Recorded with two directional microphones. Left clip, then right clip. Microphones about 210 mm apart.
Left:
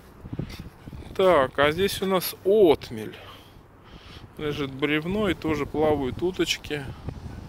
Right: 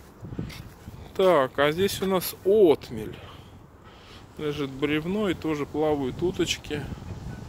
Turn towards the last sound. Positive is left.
turn(degrees=0)  # may be behind; listen again after turning